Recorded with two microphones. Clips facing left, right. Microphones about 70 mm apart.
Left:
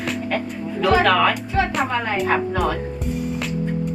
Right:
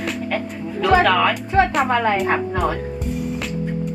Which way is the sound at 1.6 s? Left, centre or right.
Right.